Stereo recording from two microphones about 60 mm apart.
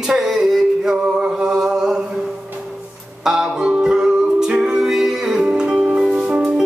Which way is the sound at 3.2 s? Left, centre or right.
Centre.